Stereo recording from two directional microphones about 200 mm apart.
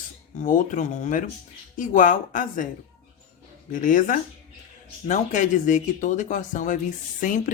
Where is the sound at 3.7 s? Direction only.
40° left (ahead or behind).